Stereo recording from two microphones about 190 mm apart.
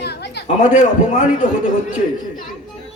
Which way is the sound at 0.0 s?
60° left (ahead or behind).